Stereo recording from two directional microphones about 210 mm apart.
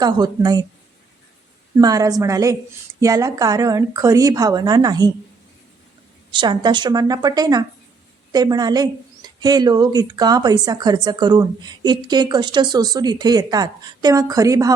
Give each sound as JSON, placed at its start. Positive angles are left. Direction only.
{"t": 0.0, "sound": "a woman's voice", "side_deg": -20}
{"t": 1.8, "sound": "a woman's voice", "side_deg": -15}
{"t": 6.3, "sound": "a woman's voice", "side_deg": -20}